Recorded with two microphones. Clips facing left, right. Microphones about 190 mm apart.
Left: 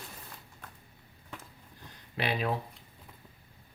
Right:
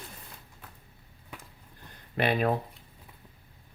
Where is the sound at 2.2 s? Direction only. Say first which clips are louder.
Right 5 dB; 50° right (ahead or behind).